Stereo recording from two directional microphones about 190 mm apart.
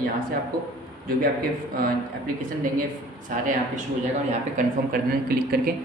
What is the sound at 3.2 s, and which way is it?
Speech, 45° right (ahead or behind).